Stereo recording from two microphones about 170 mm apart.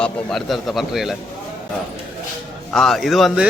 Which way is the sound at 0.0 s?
Centre (ahead or behind).